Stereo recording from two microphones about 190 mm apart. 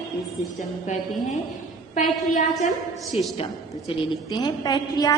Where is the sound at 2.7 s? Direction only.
Centre (ahead or behind).